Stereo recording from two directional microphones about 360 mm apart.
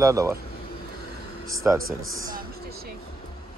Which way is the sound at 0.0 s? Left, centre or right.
Centre.